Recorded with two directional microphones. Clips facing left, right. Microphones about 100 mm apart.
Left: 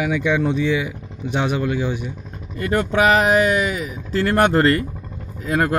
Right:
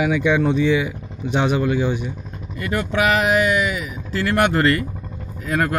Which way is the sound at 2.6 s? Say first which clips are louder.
Left 3 dB; 40° left (ahead or behind).